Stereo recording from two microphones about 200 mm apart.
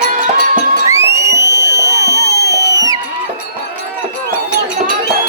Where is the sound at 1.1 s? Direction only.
15° right (ahead or behind).